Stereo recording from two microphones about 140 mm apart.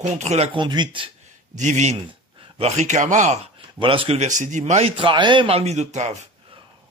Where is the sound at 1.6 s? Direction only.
55° right (ahead or behind).